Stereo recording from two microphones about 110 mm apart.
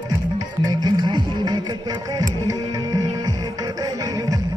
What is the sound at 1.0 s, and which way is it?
Music, 40° right (ahead or behind).